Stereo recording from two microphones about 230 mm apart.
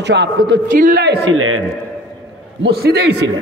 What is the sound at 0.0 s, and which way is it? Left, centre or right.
Speech, right.